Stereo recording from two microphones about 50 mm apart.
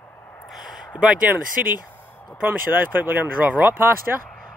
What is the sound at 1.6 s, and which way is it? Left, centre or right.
Speech, right.